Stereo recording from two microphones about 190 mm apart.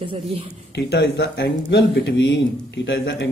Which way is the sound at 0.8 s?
60° left (ahead or behind).